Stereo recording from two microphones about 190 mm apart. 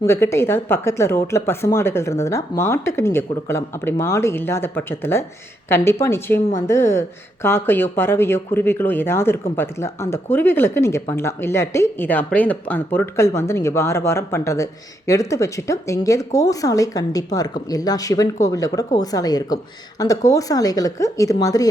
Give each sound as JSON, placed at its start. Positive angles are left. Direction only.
{"t": 0.0, "sound": "speech", "side_deg": 15}